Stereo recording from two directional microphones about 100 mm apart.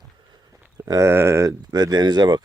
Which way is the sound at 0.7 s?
35° right (ahead or behind).